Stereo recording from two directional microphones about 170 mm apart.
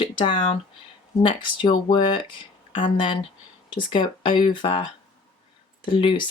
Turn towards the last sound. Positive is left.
turn(degrees=30)  # may be behind; listen again after turning